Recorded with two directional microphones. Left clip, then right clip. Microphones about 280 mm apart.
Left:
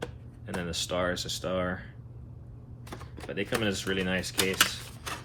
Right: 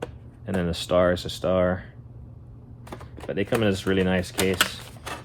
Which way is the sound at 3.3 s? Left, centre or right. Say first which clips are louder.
Right 6 dB; right.